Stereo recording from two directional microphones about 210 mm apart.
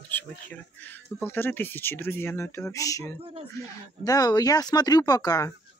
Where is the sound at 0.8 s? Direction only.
10° left (ahead or behind).